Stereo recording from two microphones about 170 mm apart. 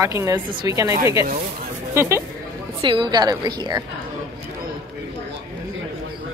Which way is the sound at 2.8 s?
25° right (ahead or behind).